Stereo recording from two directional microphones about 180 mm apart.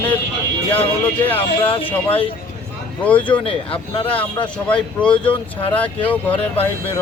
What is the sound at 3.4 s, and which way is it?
Speech, 30° left (ahead or behind).